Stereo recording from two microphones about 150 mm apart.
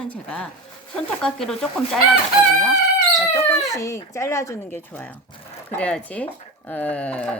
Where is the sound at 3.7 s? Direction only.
20° left (ahead or behind).